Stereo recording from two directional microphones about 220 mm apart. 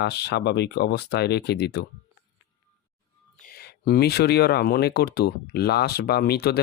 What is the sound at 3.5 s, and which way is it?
Speech, 45° left (ahead or behind).